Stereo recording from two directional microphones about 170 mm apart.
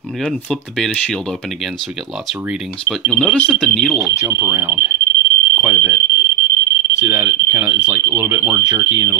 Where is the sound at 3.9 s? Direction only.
20° right (ahead or behind).